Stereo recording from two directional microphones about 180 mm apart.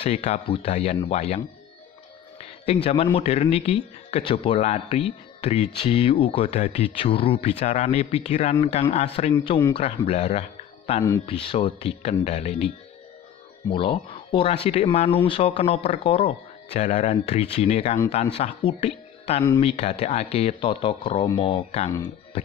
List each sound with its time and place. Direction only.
0.0 s speech: 35° left (ahead or behind)
2.6 s a man's voice: 35° left (ahead or behind)